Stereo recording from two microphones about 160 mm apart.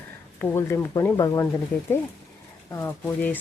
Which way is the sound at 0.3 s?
15° left (ahead or behind).